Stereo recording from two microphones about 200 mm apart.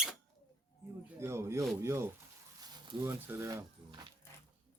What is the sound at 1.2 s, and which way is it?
Speech, 15° right (ahead or behind).